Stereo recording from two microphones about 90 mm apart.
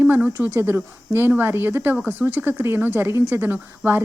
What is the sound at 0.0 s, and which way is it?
Speech, 25° right (ahead or behind).